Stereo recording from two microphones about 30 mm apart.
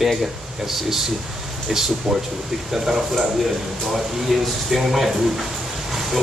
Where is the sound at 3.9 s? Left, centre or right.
Centre.